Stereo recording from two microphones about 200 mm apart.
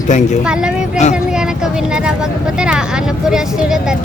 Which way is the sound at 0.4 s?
5° right (ahead or behind).